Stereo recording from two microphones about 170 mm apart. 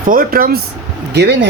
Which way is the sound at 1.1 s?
80° right.